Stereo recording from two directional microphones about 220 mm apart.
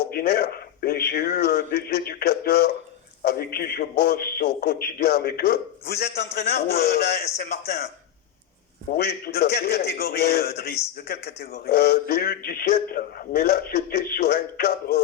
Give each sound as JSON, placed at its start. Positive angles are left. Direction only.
{"t": 0.1, "sound": "a man's voice", "side_deg": 45}
{"t": 8.9, "sound": "a man's voice", "side_deg": 45}